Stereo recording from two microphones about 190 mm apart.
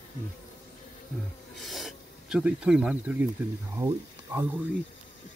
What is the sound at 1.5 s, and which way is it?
Speech, centre (ahead or behind).